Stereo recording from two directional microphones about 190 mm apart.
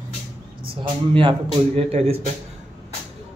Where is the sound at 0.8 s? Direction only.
25° right (ahead or behind).